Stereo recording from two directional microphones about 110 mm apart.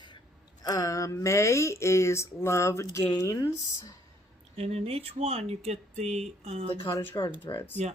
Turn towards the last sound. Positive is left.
turn(degrees=25)  # may be behind; listen again after turning